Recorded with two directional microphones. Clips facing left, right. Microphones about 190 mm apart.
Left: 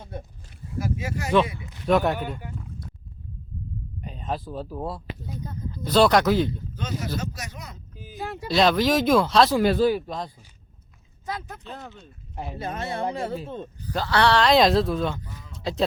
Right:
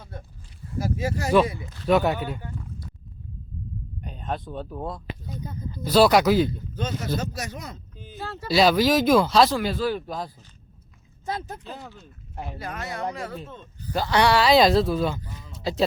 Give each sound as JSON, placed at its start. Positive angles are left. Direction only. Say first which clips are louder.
{"t": 0.0, "sound": "a sound", "louder": "left 4 dB", "side_deg": 20}
{"t": 0.8, "sound": "speech", "louder": "right 2 dB", "side_deg": -35}
{"t": 1.9, "sound": "speech", "louder": "even", "side_deg": 0}
{"t": 2.4, "sound": "a sound", "louder": "even", "side_deg": 10}
{"t": 4.0, "sound": "speech", "louder": "left 1 dB", "side_deg": 0}
{"t": 5.5, "sound": "speech", "louder": "right 2 dB", "side_deg": -5}
{"t": 6.7, "sound": "speech", "louder": "right 3 dB", "side_deg": -30}
{"t": 7.9, "sound": "a sound", "louder": "left 4 dB", "side_deg": 5}
{"t": 8.4, "sound": "speech", "louder": "right 1 dB", "side_deg": -5}
{"t": 11.3, "sound": "speech", "louder": "right 2 dB", "side_deg": -30}
{"t": 11.6, "sound": "speech", "louder": "even", "side_deg": 0}
{"t": 12.5, "sound": "speech", "louder": "left 4 dB", "side_deg": 25}
{"t": 13.9, "sound": "speech", "louder": "right 1 dB", "side_deg": -15}
{"t": 15.5, "sound": "a sound", "louder": "right 1 dB", "side_deg": 0}